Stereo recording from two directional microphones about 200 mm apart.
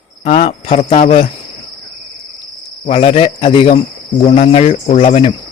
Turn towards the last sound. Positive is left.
turn(degrees=30)  # may be behind; listen again after turning